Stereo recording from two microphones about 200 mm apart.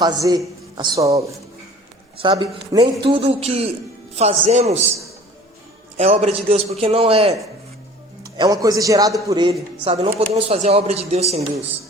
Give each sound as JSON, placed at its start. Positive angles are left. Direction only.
{"t": 0.0, "sound": "a man's voice", "side_deg": -20}
{"t": 6.0, "sound": "a man's voice", "side_deg": -30}
{"t": 8.4, "sound": "a man's voice", "side_deg": -20}